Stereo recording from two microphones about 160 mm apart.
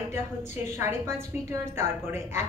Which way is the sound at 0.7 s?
15° right (ahead or behind).